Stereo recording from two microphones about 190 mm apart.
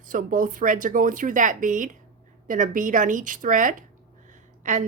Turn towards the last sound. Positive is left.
turn(degrees=-40)  # may be behind; listen again after turning